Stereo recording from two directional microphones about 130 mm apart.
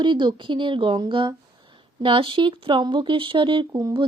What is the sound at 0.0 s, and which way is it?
Speech, 35° right (ahead or behind).